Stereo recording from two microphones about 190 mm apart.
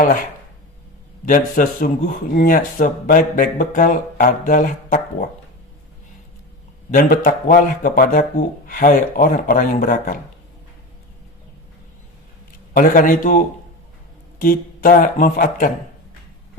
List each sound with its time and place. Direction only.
1.2 s speech: 45° left (ahead or behind)
6.9 s speech: 50° left (ahead or behind)
12.7 s speech: 45° left (ahead or behind)
14.3 s speech: 50° left (ahead or behind)